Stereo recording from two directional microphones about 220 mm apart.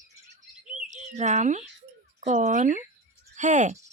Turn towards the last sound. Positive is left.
turn(degrees=-35)  # may be behind; listen again after turning